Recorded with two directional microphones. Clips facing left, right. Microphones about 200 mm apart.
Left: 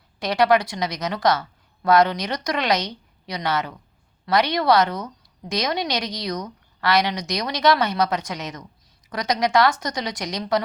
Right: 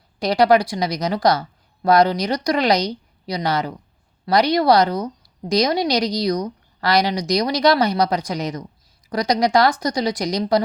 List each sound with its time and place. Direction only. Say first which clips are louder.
0.2 s a woman's voice: right 3 dB; 35° right (ahead or behind)